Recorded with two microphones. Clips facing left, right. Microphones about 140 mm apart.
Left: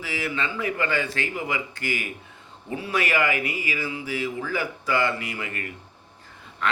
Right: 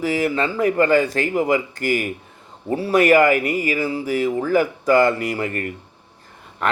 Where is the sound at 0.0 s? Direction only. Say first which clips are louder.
Right 9 dB; 45° right (ahead or behind).